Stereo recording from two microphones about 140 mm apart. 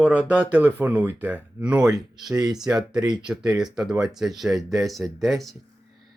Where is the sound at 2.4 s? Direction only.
5° right (ahead or behind).